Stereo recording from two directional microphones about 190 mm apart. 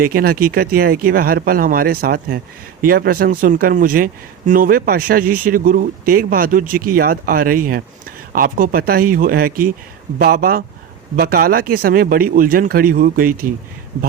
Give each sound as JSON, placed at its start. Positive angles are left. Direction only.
{"t": 0.0, "sound": "a man's voice", "side_deg": -50}